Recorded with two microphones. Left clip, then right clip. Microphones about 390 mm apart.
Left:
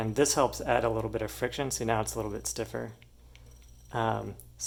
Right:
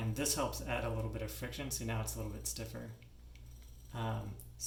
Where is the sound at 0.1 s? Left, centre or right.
Centre.